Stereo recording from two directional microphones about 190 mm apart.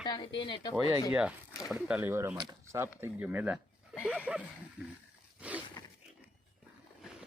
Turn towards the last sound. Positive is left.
turn(degrees=-5)  # may be behind; listen again after turning